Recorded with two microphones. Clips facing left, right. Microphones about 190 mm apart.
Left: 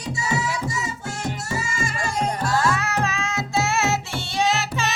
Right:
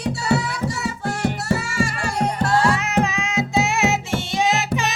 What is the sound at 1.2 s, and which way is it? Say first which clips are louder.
Music: right 6 dB; 65° right (ahead or behind).